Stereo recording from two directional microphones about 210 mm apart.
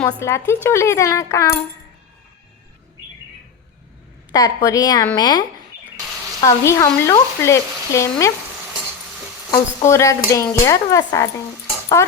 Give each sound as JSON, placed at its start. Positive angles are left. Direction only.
{"t": 0.0, "sound": "speech", "side_deg": 10}
{"t": 4.3, "sound": "speech", "side_deg": 15}
{"t": 9.5, "sound": "speech", "side_deg": 15}